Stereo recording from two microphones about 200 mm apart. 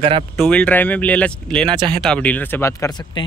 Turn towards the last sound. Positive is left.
turn(degrees=20)  # may be behind; listen again after turning